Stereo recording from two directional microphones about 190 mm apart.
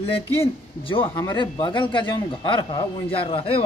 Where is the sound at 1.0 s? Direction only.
15° left (ahead or behind).